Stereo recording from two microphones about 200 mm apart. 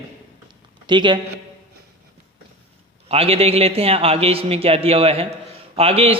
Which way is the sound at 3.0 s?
30° right (ahead or behind).